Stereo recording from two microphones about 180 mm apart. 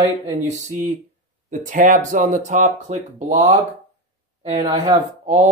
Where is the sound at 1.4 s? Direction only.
45° right (ahead or behind).